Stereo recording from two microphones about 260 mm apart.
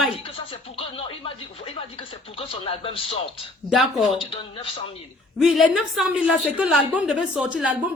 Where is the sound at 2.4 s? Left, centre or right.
Left.